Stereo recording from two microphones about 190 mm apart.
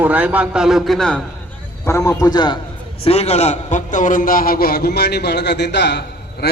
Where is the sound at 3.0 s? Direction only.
35° left (ahead or behind).